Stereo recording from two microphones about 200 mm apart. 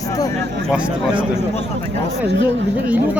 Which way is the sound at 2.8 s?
10° right (ahead or behind).